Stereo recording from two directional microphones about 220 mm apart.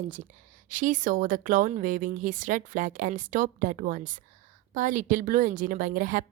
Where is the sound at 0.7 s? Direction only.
35° right (ahead or behind).